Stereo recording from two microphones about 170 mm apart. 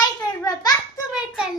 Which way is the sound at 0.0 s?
25° left (ahead or behind).